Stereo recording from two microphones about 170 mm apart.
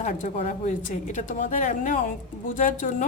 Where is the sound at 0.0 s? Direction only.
50° left (ahead or behind).